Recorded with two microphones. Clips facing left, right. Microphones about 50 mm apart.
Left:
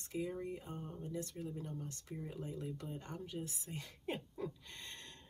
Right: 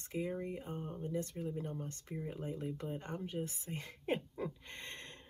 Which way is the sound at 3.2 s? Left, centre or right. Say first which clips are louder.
Right 4 dB; right.